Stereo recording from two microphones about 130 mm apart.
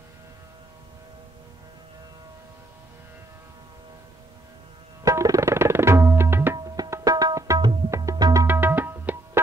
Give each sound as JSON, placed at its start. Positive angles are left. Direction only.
{"t": 5.0, "sound": "tabla", "side_deg": -25}